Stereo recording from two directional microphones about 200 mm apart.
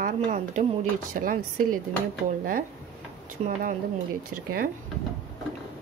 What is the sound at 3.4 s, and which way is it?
Speech, 35° right (ahead or behind).